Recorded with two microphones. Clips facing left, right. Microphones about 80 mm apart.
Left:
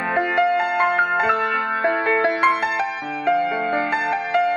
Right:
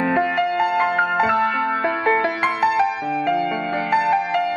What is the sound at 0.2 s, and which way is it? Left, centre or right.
Music, left.